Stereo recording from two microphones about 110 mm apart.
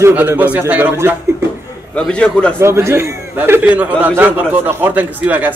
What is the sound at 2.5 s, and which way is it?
A man's voice, 25° right (ahead or behind).